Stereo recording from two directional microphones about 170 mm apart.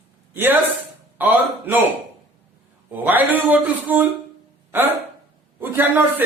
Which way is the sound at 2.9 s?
10° right (ahead or behind).